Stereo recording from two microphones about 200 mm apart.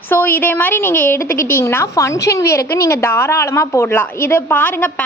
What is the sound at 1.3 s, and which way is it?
Speech, 45° left (ahead or behind).